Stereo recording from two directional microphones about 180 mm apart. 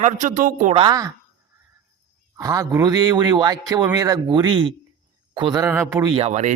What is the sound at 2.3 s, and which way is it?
A man's voice, 15° right (ahead or behind).